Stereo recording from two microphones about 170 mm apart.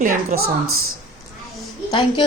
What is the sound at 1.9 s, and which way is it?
Speech, 30° left (ahead or behind).